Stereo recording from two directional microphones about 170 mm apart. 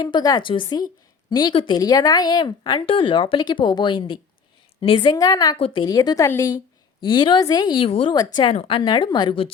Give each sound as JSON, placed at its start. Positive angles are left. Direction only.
{"t": 0.0, "sound": "speech", "side_deg": 25}
{"t": 5.5, "sound": "speech", "side_deg": 30}